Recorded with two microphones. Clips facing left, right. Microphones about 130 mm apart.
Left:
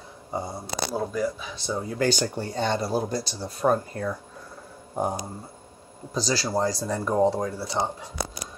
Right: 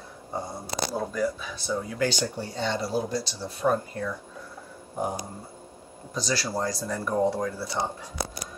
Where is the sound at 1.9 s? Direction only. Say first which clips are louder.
Left 6 dB; 45° left (ahead or behind).